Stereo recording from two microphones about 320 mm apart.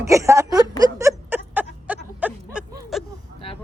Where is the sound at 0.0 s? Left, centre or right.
Centre.